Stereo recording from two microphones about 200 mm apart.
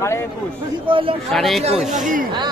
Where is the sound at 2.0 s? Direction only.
40° right (ahead or behind).